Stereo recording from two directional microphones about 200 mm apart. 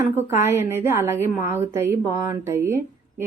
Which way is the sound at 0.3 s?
10° right (ahead or behind).